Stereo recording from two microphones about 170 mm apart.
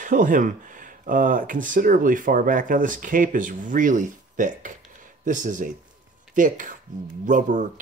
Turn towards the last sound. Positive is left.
turn(degrees=-50)  # may be behind; listen again after turning